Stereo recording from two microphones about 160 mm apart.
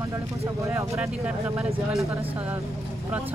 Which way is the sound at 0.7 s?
15° right (ahead or behind).